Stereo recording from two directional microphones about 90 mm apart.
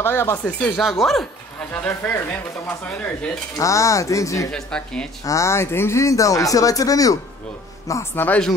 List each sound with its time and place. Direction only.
0.0 s speech: 25° left (ahead or behind)
1.0 s speech: centre (ahead or behind)
1.7 s speech: 20° left (ahead or behind)
3.5 s speech: 35° left (ahead or behind)
4.5 s speech: 10° left (ahead or behind)
5.2 s speech: 35° left (ahead or behind)
7.9 s speech: 25° left (ahead or behind)